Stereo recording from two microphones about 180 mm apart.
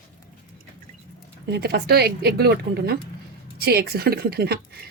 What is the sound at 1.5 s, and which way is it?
Speech, 60° right (ahead or behind).